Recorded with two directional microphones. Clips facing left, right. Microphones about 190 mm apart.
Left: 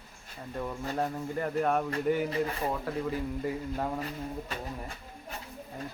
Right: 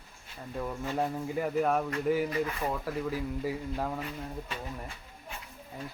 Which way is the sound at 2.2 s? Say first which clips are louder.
Left 1 dB; 30° left (ahead or behind).